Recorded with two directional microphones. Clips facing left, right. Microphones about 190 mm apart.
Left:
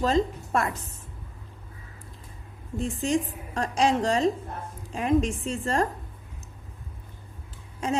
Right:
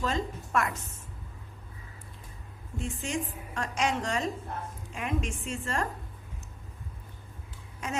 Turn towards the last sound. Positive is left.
turn(degrees=30)  # may be behind; listen again after turning